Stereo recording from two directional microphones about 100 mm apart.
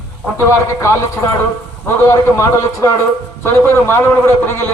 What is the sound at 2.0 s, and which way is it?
Speech, 30° left (ahead or behind).